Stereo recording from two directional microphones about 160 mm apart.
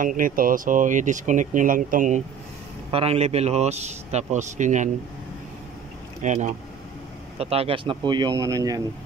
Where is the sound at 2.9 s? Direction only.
40° right (ahead or behind).